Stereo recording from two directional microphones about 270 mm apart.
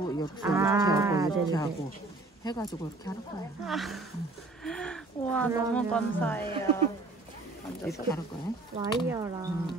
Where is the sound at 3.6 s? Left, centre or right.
Centre.